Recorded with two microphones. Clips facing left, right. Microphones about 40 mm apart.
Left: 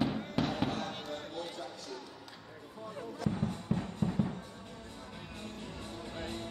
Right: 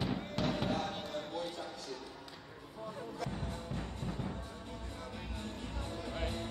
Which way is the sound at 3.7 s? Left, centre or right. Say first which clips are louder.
Left 9 dB; left.